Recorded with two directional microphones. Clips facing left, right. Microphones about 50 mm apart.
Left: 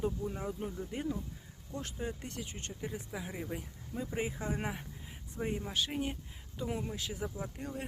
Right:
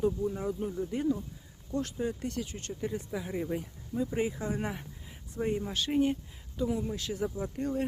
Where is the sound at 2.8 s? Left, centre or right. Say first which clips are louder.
Right 6 dB; centre.